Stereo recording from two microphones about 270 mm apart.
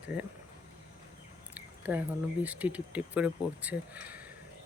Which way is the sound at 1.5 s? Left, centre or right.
Centre.